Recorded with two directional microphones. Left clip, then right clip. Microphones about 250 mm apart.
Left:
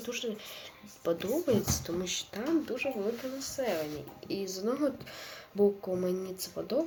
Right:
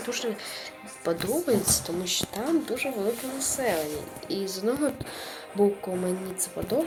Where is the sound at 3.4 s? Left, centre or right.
Centre.